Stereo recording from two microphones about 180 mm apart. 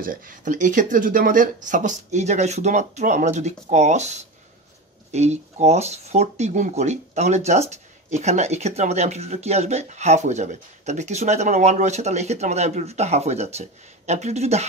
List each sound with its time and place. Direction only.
0.0 s speech: 50° right (ahead or behind)